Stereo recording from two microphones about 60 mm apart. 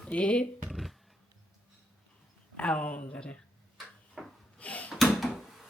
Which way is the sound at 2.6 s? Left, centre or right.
Centre.